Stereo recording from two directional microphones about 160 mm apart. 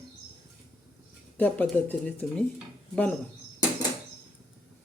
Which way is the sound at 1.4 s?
10° left (ahead or behind).